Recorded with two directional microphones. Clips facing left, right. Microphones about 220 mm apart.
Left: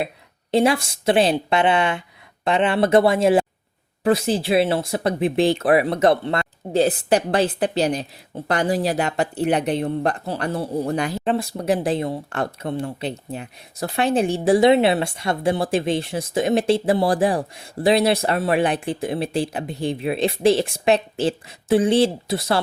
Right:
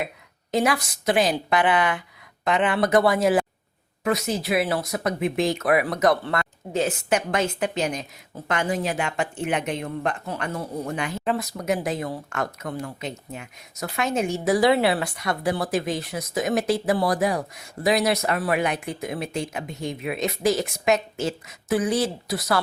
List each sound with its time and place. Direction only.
0.5 s a woman's voice: 25° left (ahead or behind)